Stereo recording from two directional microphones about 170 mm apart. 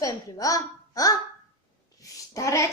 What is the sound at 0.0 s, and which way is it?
A woman's voice, 20° left (ahead or behind).